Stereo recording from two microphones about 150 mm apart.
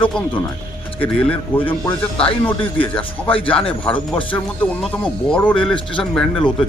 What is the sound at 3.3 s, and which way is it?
Speech, 35° left (ahead or behind).